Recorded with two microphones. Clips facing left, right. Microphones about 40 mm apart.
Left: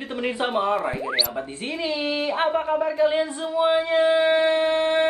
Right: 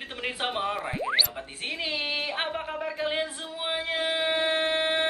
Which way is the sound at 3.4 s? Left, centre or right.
Centre.